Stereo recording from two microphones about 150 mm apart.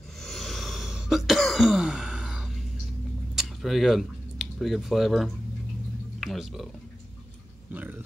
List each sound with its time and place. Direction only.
0.2 s throat clearing: centre (ahead or behind)
3.3 s speech: centre (ahead or behind)